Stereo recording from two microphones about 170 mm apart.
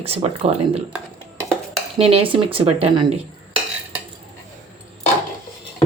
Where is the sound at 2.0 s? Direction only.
35° right (ahead or behind).